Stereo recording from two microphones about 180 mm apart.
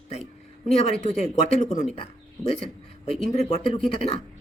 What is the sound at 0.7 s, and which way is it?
Speech, 35° left (ahead or behind).